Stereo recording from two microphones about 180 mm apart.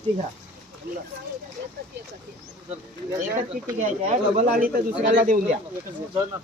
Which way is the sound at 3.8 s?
45° right (ahead or behind).